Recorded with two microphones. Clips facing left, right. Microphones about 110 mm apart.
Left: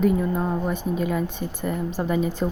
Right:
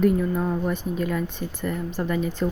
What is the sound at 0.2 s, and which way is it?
A woman's voice, 5° left (ahead or behind).